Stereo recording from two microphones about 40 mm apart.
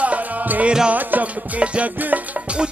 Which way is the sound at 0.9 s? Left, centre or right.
Right.